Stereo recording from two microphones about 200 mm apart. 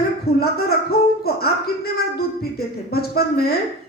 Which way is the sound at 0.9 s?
50° left (ahead or behind).